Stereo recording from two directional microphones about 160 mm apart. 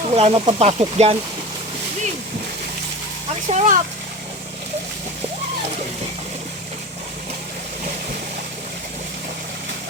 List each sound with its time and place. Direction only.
0.1 s speech: 35° right (ahead or behind)
3.5 s speech: 45° right (ahead or behind)